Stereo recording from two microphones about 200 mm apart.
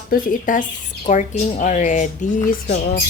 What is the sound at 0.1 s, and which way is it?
Speech, 45° left (ahead or behind).